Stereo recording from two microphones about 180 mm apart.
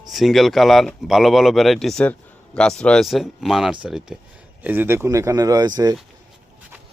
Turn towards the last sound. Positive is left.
turn(degrees=-20)  # may be behind; listen again after turning